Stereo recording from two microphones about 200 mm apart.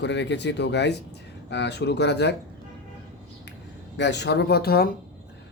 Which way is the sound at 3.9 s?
60° left (ahead or behind).